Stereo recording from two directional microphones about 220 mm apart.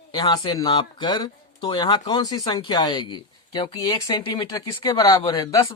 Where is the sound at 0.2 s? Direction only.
20° left (ahead or behind).